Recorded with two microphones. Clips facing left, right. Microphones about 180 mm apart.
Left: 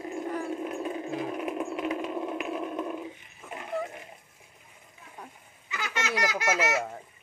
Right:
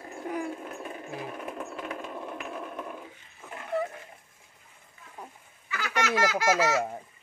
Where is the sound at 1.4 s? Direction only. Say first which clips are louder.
Left 6 dB; 15° left (ahead or behind).